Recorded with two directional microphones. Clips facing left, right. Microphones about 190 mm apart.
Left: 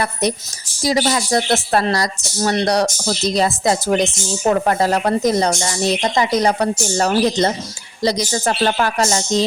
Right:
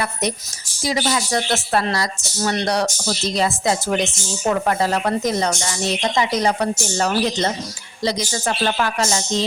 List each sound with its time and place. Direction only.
0.0 s speech: 35° left (ahead or behind)